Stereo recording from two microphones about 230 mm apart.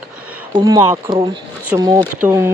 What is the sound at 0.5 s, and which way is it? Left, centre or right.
Speech, centre.